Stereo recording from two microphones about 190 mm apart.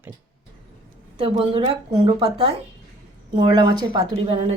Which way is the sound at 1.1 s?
30° right (ahead or behind).